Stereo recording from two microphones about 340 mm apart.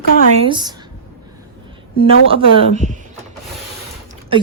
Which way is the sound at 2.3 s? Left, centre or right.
Centre.